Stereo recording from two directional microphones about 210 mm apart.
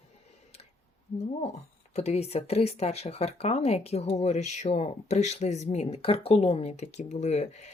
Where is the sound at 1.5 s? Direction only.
30° left (ahead or behind).